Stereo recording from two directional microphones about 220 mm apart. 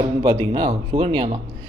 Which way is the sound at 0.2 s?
20° right (ahead or behind).